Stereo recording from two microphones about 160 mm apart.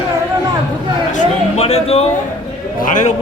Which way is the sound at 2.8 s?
55° left (ahead or behind).